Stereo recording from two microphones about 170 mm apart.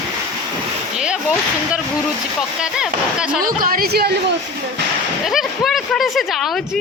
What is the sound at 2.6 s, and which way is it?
Speech, 5° right (ahead or behind).